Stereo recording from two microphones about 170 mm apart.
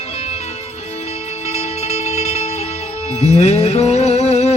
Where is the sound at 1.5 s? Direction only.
40° left (ahead or behind).